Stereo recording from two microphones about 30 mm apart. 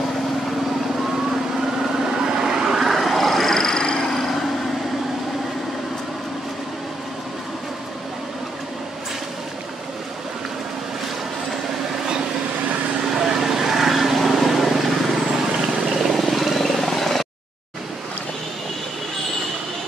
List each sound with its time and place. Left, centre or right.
2.0 s vehicle: right
3.0 s a sound: centre
3.7 s vehicle: left
4.1 s vehicle: centre
13.3 s vehicle: centre